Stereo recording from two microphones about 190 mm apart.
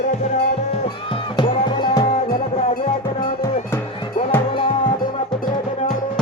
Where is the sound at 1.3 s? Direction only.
25° left (ahead or behind).